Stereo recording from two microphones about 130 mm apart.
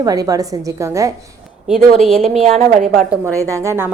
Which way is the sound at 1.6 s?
Centre (ahead or behind).